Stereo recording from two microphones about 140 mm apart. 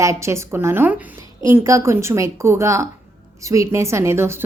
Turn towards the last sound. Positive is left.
turn(degrees=-20)  # may be behind; listen again after turning